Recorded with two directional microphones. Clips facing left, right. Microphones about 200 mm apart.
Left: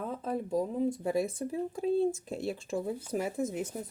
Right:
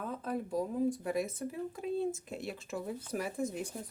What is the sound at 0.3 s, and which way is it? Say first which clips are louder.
Speech: left 3 dB; 25° left (ahead or behind).